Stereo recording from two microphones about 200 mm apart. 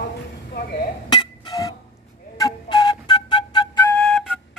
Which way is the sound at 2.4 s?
20° left (ahead or behind).